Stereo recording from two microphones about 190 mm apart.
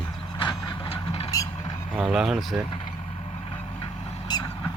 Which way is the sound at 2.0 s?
5° right (ahead or behind).